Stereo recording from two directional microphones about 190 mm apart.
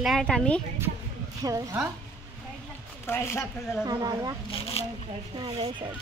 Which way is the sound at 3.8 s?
20° right (ahead or behind).